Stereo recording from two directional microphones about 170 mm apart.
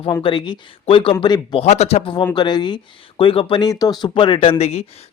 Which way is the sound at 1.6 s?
40° left (ahead or behind).